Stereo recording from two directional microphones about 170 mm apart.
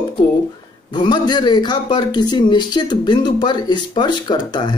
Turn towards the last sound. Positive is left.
turn(degrees=25)  # may be behind; listen again after turning